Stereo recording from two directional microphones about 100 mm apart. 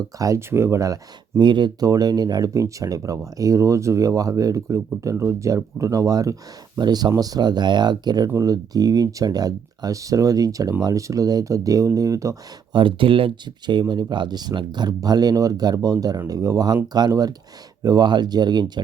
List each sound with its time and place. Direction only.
0.0 s speech: 35° right (ahead or behind)
1.4 s speech: 50° right (ahead or behind); by 12.4 s 35° right (ahead or behind)
12.7 s speech: 55° right (ahead or behind)